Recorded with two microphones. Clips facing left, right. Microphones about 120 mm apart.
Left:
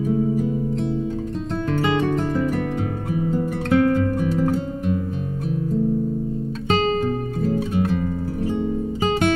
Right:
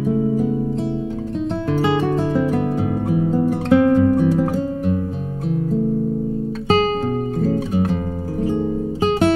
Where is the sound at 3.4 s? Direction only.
20° right (ahead or behind).